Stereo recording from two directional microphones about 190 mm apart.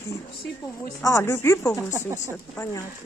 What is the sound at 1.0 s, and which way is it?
Speech, 15° left (ahead or behind).